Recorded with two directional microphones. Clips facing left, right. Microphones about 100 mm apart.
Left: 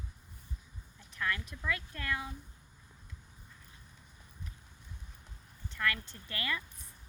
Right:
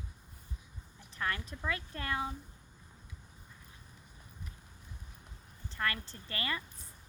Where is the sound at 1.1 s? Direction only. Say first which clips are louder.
Even; 35° right (ahead or behind).